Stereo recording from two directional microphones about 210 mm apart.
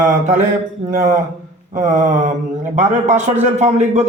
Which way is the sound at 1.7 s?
35° right (ahead or behind).